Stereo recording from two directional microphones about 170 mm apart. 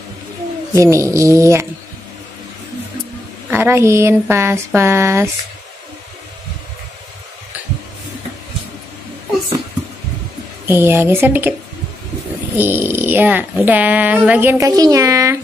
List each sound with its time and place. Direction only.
0.7 s speech: 15° right (ahead or behind)
3.4 s speech: 15° right (ahead or behind)
10.7 s speech: 10° right (ahead or behind)
12.5 s speech: 10° right (ahead or behind)